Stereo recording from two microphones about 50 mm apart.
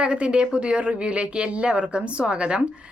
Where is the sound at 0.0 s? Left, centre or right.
Right.